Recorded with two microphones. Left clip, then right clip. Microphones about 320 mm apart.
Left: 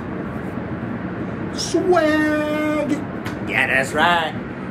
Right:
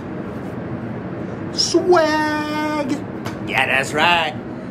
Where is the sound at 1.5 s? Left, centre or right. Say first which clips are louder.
Right 3 dB; centre.